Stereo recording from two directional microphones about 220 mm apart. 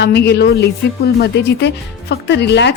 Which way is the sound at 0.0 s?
50° left (ahead or behind).